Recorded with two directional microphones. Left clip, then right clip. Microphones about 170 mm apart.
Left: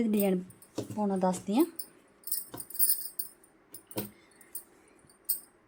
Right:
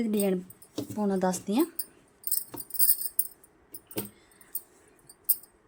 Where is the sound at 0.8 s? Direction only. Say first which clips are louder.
Right 2 dB; 15° right (ahead or behind).